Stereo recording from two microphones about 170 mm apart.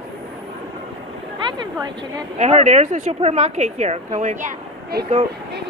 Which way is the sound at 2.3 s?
40° right (ahead or behind).